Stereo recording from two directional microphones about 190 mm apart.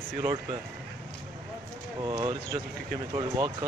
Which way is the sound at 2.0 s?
20° right (ahead or behind).